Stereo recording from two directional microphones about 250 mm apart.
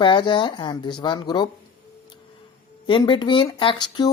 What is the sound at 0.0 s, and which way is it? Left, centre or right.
Speech, centre.